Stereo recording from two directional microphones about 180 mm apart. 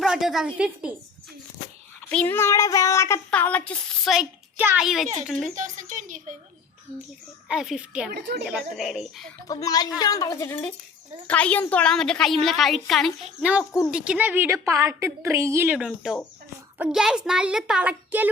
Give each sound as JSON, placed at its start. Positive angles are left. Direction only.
{"t": 0.0, "sound": "a woman's voice", "side_deg": -5}
{"t": 2.0, "sound": "child singing", "side_deg": 10}
{"t": 3.2, "sound": "a woman's voice", "side_deg": 10}
{"t": 5.5, "sound": "a sound", "side_deg": -45}
{"t": 7.4, "sound": "a woman's voice", "side_deg": -5}
{"t": 8.1, "sound": "a woman's voice", "side_deg": -65}
{"t": 8.4, "sound": "a woman's voice", "side_deg": 0}
{"t": 9.5, "sound": "a woman's voice", "side_deg": 20}